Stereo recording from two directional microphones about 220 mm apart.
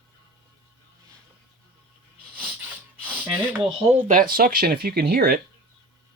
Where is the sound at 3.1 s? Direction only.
5° right (ahead or behind).